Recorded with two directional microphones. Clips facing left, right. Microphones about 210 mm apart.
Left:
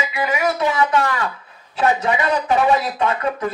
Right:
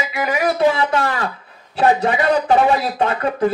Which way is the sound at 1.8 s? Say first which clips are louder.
Right 3 dB; 35° right (ahead or behind).